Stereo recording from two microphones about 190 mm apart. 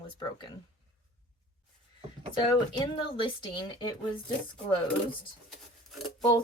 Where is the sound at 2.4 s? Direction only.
25° left (ahead or behind).